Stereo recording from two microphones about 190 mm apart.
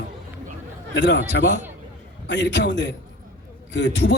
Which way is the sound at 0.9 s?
65° left (ahead or behind).